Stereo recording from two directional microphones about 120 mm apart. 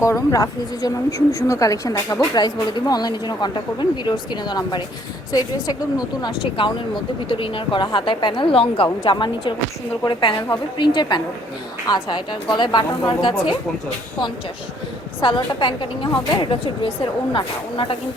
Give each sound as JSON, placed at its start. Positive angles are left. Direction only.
{"t": 0.0, "sound": "a woman's voice", "side_deg": 25}
{"t": 15.2, "sound": "a woman's voice", "side_deg": 40}